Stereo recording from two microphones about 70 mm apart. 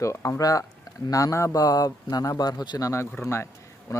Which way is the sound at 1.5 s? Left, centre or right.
Left.